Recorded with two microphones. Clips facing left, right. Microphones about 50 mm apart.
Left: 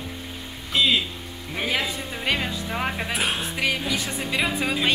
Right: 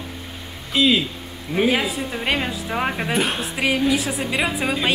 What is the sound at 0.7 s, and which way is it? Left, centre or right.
Speech, centre.